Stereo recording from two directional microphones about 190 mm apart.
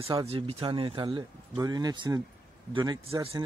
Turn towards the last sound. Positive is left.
turn(degrees=-30)  # may be behind; listen again after turning